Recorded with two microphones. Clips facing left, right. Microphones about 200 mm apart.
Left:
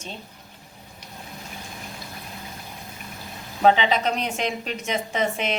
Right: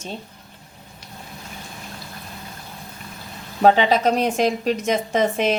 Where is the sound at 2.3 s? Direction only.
15° left (ahead or behind).